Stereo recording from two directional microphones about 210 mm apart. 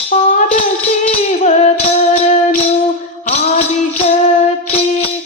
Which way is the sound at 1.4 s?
30° left (ahead or behind).